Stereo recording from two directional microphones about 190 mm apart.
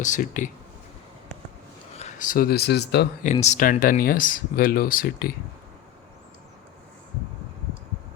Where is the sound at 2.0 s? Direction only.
40° left (ahead or behind); by 3.1 s 60° left (ahead or behind).